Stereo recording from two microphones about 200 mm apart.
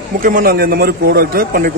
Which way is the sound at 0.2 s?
45° right (ahead or behind).